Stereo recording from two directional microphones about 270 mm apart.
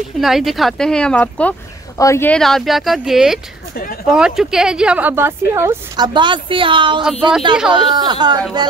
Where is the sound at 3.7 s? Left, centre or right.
Left.